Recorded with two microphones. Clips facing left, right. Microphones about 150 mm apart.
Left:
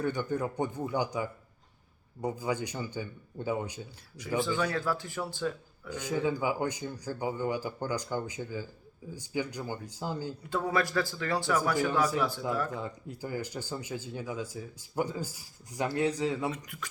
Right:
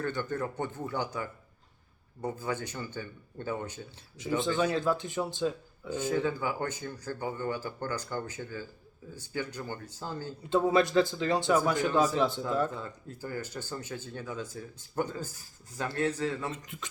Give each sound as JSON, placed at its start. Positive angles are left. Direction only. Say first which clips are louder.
{"t": 0.0, "sound": "speech", "louder": "left 2 dB", "side_deg": 10}
{"t": 4.4, "sound": "speech", "louder": "right 1 dB", "side_deg": -20}
{"t": 5.9, "sound": "speech", "louder": "right 1 dB", "side_deg": 15}
{"t": 10.5, "sound": "speech", "louder": "right 5 dB", "side_deg": -20}
{"t": 12.7, "sound": "speech", "louder": "left 3 dB", "side_deg": 15}
{"t": 16.5, "sound": "speech", "louder": "left 2 dB", "side_deg": -20}